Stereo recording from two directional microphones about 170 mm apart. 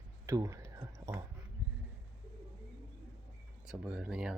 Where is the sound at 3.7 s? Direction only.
10° right (ahead or behind).